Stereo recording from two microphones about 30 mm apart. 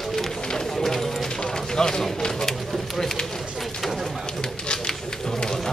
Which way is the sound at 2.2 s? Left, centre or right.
Centre.